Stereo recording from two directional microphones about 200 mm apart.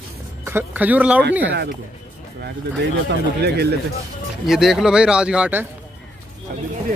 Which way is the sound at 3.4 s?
55° right (ahead or behind).